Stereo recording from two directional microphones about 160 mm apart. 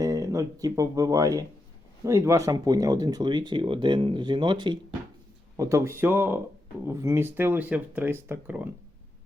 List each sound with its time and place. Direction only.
0.0 s speech: 20° right (ahead or behind)